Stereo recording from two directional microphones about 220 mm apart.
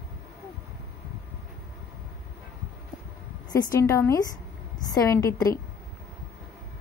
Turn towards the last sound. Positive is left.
turn(degrees=15)  # may be behind; listen again after turning